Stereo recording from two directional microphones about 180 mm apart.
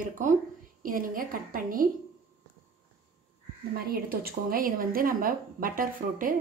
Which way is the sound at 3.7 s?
55° right (ahead or behind).